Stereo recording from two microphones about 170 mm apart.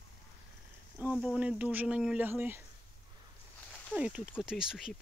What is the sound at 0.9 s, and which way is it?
Speech, 5° right (ahead or behind).